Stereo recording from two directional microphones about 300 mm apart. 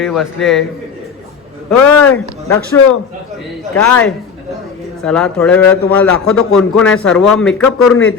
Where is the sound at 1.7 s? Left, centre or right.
Centre.